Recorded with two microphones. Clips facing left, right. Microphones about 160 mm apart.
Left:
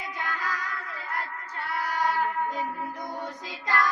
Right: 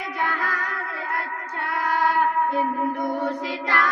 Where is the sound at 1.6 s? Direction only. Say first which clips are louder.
Right 5 dB; 75° right (ahead or behind).